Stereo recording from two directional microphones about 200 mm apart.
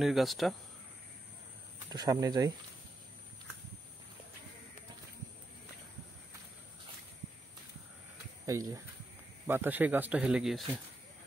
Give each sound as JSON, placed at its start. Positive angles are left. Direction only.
{"t": 0.0, "sound": "speech", "side_deg": 0}
{"t": 1.9, "sound": "speech", "side_deg": -20}
{"t": 8.5, "sound": "speech", "side_deg": -15}